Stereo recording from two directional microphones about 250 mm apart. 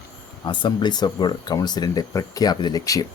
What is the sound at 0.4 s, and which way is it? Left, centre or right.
Speech, centre.